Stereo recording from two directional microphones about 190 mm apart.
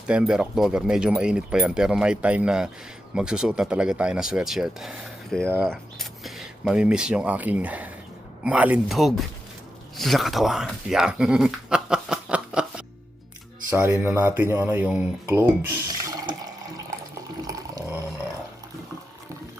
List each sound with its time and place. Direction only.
0.1 s speech: 5° right (ahead or behind)
17.4 s water: 15° right (ahead or behind)